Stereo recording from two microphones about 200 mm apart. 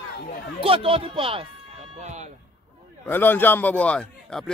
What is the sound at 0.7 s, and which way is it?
Speech, 25° right (ahead or behind).